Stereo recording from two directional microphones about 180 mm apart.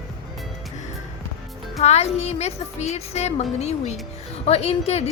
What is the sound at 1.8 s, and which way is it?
A woman's voice, 35° left (ahead or behind).